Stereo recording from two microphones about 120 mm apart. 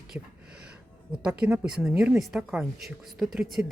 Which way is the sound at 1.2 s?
5° right (ahead or behind).